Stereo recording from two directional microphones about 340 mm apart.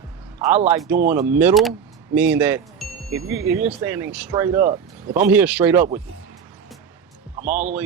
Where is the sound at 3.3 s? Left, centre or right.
Centre.